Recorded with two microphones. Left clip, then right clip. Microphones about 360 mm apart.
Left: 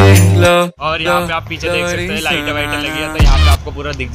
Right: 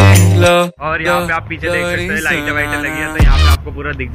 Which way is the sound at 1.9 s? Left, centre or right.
Centre.